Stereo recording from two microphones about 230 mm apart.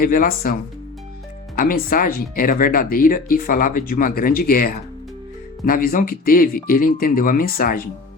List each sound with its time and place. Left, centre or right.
0.0 s speech: left
1.5 s speech: left